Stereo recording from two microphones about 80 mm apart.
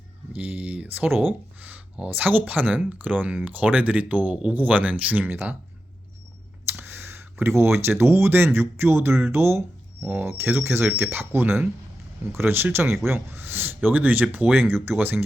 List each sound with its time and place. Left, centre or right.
0.3 s speech: centre
6.7 s speech: right